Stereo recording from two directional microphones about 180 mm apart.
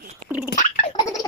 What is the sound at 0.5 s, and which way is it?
Gargling, 45° left (ahead or behind).